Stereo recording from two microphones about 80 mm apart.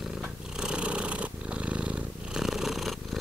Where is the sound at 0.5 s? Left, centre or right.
Centre.